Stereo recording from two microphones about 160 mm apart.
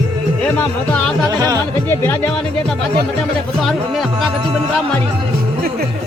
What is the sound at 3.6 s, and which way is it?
Speech, centre (ahead or behind).